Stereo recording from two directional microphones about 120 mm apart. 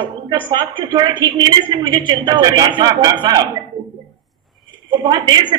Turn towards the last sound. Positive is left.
turn(degrees=-35)  # may be behind; listen again after turning